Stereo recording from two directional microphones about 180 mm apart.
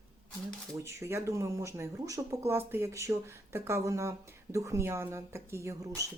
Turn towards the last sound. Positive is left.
turn(degrees=-20)  # may be behind; listen again after turning